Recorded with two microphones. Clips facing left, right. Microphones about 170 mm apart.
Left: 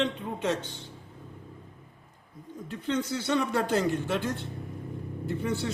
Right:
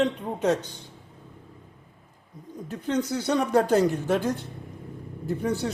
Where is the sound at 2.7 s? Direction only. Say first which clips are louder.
Right 3 dB; 40° right (ahead or behind).